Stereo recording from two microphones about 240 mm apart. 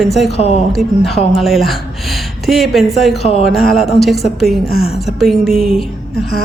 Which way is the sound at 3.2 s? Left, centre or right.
Left.